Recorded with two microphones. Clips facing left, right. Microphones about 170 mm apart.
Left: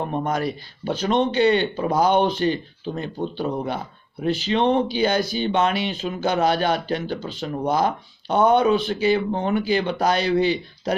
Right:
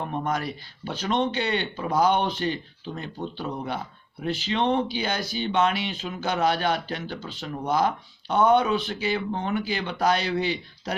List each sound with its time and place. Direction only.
0.0 s speech: 35° left (ahead or behind)